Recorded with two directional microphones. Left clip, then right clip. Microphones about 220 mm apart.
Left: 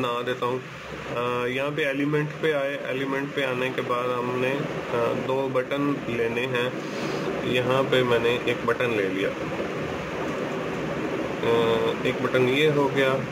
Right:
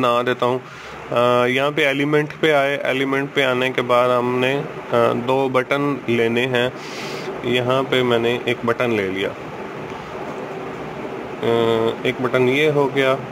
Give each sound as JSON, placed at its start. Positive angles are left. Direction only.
{"t": 0.0, "sound": "speech", "side_deg": -45}
{"t": 11.6, "sound": "speech", "side_deg": -40}